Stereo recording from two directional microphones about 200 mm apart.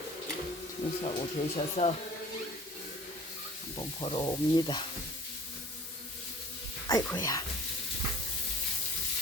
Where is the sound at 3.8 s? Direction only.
25° left (ahead or behind).